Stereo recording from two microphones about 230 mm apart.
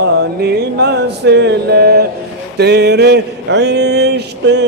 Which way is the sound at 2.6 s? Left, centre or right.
Right.